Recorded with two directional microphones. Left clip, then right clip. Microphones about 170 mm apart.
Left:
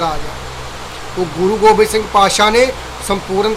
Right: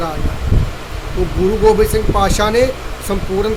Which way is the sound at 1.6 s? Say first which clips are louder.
Left 3 dB; 20° right (ahead or behind).